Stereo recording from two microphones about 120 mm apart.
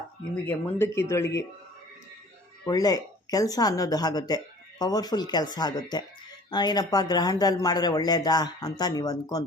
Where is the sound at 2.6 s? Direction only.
30° left (ahead or behind).